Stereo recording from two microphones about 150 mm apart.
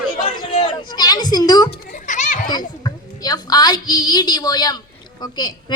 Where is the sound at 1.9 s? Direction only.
55° left (ahead or behind).